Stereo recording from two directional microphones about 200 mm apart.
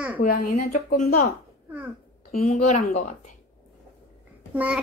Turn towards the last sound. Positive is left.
turn(degrees=-5)  # may be behind; listen again after turning